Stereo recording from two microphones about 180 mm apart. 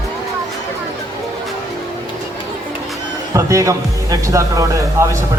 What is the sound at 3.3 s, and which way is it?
Speech, 15° right (ahead or behind).